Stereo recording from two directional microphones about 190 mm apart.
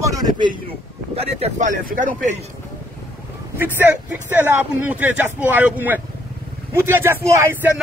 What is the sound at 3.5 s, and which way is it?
Speech, 10° right (ahead or behind).